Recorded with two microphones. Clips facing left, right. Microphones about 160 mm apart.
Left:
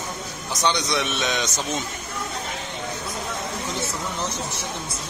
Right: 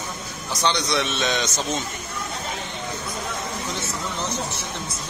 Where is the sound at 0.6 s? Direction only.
10° left (ahead or behind).